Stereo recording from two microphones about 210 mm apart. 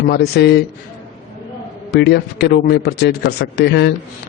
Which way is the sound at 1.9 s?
50° left (ahead or behind).